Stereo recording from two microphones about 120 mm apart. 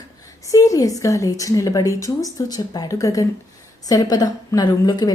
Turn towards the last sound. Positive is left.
turn(degrees=35)  # may be behind; listen again after turning